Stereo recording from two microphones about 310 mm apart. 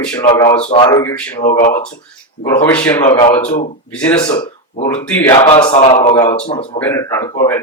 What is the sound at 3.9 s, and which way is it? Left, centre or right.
Speech, centre.